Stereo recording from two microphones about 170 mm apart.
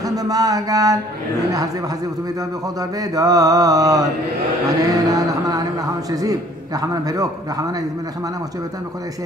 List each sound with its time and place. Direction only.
0.0 s a man's voice: 20° right (ahead or behind)
2.8 s a man's voice: 20° right (ahead or behind)